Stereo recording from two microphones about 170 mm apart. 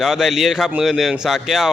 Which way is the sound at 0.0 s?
Centre (ahead or behind).